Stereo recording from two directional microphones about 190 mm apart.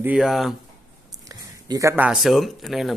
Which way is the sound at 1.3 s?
20° right (ahead or behind).